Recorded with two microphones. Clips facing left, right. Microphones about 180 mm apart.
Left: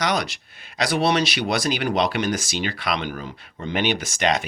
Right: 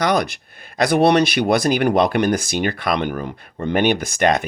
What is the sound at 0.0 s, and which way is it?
Speech, 55° right (ahead or behind).